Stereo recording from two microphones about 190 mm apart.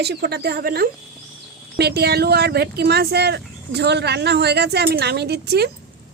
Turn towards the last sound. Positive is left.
turn(degrees=-60)  # may be behind; listen again after turning